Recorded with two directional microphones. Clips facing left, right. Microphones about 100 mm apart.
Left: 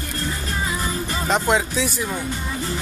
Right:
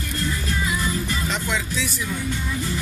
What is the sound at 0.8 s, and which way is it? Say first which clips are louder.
Speech: even; 40° left (ahead or behind).